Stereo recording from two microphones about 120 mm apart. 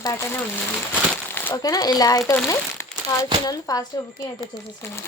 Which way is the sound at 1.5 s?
30° left (ahead or behind).